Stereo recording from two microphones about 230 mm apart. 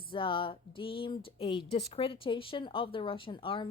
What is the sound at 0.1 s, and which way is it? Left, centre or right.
Speech, left.